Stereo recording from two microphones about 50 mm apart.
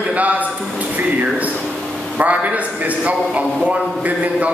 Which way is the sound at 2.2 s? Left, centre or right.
Right.